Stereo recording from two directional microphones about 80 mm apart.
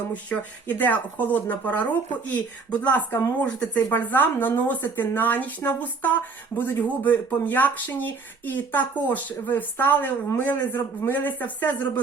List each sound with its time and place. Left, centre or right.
0.1 s speech: centre